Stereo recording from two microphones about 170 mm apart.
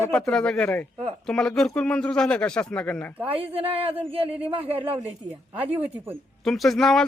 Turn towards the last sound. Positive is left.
turn(degrees=0)  # may be behind; listen again after turning